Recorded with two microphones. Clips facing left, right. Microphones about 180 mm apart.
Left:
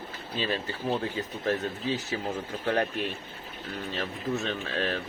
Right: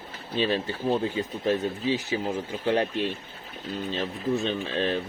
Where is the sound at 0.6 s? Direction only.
20° right (ahead or behind).